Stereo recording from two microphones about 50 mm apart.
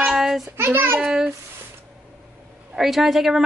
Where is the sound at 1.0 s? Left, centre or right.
Centre.